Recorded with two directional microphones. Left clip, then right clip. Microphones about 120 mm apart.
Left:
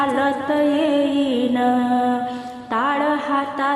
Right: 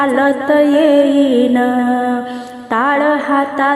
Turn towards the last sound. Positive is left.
turn(degrees=-45)  # may be behind; listen again after turning